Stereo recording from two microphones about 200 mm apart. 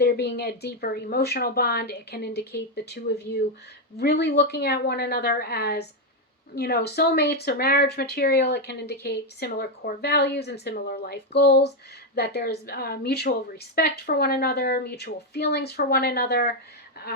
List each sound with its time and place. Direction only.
0.0 s speech: 55° left (ahead or behind)